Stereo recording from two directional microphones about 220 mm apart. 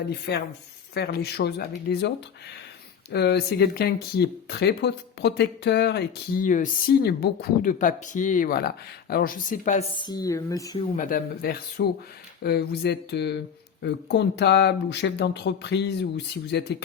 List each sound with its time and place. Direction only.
0.1 s speech: 50° left (ahead or behind); by 10.8 s 15° left (ahead or behind)
10.9 s speech: 40° left (ahead or behind)